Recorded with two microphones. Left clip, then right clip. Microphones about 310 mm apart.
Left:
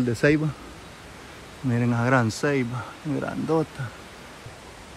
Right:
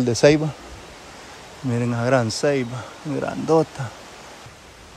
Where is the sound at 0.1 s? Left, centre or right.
Centre.